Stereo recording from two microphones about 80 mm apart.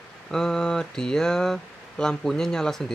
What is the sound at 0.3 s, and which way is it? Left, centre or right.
Speech, centre.